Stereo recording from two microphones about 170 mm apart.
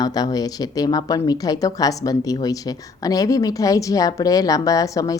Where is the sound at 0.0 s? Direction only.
20° left (ahead or behind).